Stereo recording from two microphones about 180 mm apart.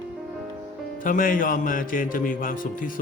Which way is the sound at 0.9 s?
50° left (ahead or behind).